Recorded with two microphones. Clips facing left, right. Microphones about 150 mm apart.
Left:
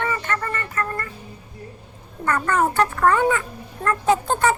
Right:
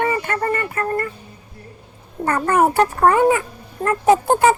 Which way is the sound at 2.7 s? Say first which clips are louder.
Right 3 dB; 30° right (ahead or behind).